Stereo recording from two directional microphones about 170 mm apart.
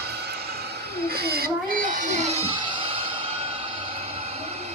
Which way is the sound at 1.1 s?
65° right (ahead or behind).